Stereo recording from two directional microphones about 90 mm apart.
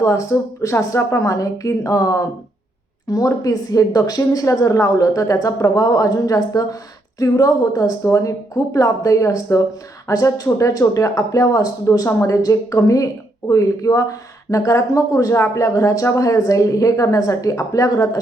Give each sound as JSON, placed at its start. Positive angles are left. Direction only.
{"t": 0.0, "sound": "speech", "side_deg": 35}